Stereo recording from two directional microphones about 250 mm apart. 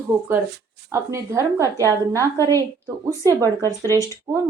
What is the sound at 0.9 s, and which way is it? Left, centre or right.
A woman's voice, centre.